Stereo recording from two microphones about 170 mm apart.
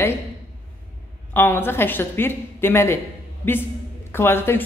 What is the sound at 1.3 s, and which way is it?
A woman's voice, 15° left (ahead or behind).